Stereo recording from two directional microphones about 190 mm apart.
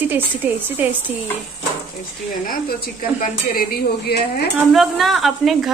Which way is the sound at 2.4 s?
50° left (ahead or behind).